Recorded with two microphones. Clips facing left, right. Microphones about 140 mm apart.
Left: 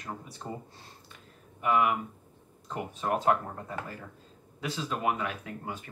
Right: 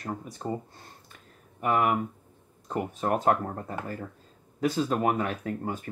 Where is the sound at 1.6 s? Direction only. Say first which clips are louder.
Right 1 dB; 45° right (ahead or behind).